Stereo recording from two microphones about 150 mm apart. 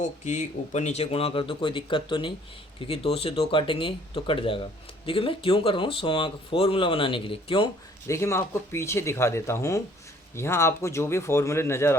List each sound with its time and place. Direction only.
0.0 s speech: 50° left (ahead or behind); by 7.7 s 35° left (ahead or behind)
8.0 s speech: 20° left (ahead or behind)